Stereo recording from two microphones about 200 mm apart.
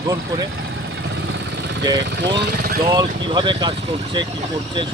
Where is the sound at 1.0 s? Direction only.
60° right (ahead or behind).